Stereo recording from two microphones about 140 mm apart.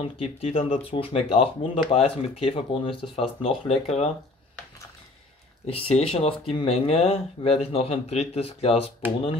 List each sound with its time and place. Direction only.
0.0 s speech: 45° left (ahead or behind)
5.7 s speech: 45° left (ahead or behind)